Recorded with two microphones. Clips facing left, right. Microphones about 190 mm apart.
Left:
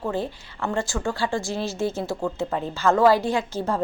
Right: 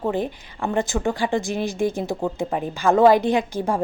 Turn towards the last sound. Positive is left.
turn(degrees=-15)  # may be behind; listen again after turning